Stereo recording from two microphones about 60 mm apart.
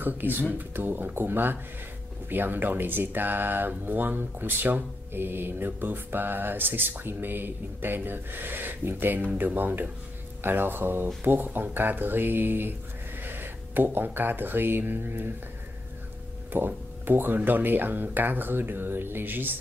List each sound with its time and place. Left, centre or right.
0.0 s speech: right
16.5 s speech: right